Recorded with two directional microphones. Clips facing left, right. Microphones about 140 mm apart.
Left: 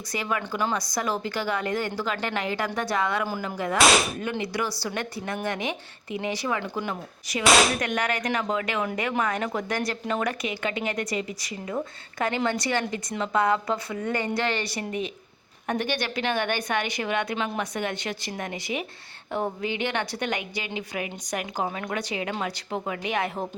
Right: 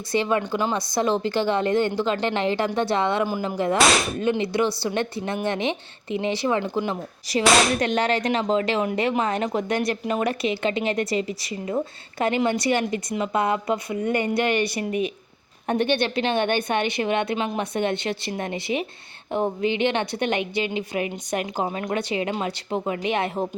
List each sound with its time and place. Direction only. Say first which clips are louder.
0.1 s a woman's voice: right 7 dB; 25° right (ahead or behind)